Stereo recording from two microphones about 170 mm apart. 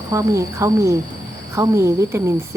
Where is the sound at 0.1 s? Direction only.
20° right (ahead or behind).